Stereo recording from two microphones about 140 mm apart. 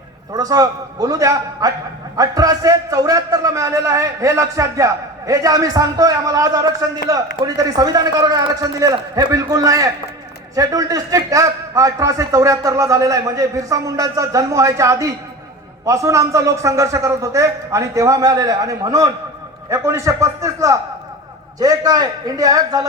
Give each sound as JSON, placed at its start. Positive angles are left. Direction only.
{"t": 0.3, "sound": "a man's voice", "side_deg": -25}